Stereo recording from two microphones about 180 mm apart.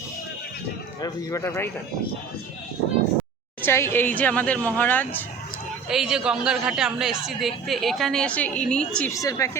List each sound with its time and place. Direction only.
1.0 s speech: 15° left (ahead or behind)
3.6 s speech: 15° left (ahead or behind)
5.9 s a woman's voice: 5° right (ahead or behind)
9.1 s speech: 20° left (ahead or behind)